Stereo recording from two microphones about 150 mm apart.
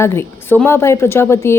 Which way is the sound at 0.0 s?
15° left (ahead or behind).